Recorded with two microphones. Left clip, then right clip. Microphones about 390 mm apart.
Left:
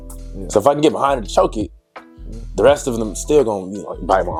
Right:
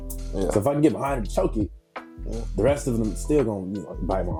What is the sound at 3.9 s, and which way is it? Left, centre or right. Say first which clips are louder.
Speech: left 11 dB; centre.